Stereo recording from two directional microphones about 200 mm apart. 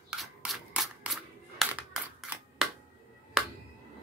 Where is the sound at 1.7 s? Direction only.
5° right (ahead or behind).